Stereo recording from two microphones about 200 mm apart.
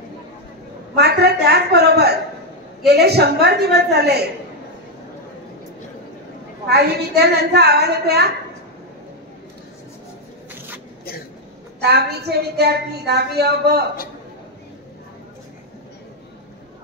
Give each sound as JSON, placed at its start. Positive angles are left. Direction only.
{"t": 0.9, "sound": "a sound", "side_deg": -55}
{"t": 2.9, "sound": "a woman's voice", "side_deg": -55}
{"t": 6.7, "sound": "a woman's voice", "side_deg": -55}
{"t": 11.8, "sound": "a woman's voice", "side_deg": -55}